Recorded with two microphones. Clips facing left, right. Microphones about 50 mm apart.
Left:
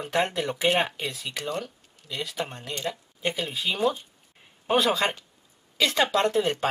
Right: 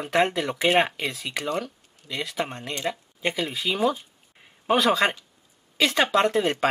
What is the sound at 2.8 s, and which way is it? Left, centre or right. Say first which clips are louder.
Speech: right 3 dB; right.